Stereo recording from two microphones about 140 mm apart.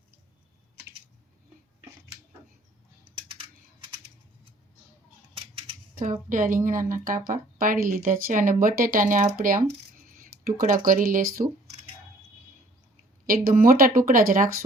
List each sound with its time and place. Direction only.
6.2 s a woman's voice: 70° right (ahead or behind); by 11.4 s 90° right
13.2 s speech: 85° right